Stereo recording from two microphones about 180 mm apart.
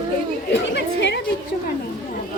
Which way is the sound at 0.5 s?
75° left (ahead or behind).